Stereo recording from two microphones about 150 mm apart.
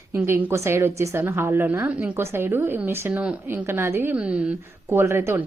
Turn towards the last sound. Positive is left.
turn(degrees=-15)  # may be behind; listen again after turning